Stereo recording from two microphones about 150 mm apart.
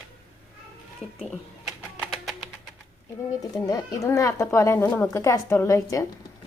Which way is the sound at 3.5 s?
25° left (ahead or behind).